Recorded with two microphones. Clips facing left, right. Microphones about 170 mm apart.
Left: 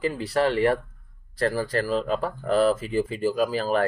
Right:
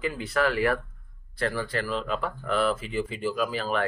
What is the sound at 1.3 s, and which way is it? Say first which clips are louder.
Speech: left 4 dB; 40° left (ahead or behind).